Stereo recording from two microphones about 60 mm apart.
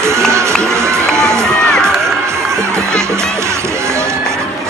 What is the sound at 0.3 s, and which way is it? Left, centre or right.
Music, right.